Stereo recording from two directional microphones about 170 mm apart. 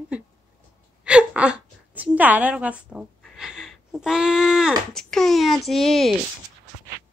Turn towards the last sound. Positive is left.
turn(degrees=0)  # may be behind; listen again after turning